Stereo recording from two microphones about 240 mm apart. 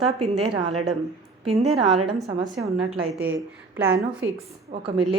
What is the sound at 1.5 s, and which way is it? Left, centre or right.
Speech, right.